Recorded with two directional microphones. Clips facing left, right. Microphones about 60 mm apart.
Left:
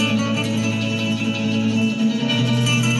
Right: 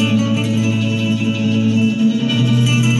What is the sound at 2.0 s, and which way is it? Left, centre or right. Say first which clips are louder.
Music: right 4 dB; left.